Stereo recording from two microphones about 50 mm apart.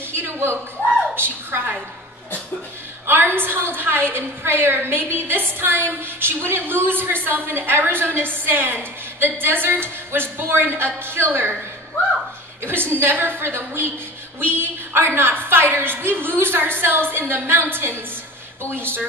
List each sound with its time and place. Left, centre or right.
0.1 s a sound: right
1.1 s a woman's voice: right
3.3 s a woman's voice: right
12.6 s a woman's voice: right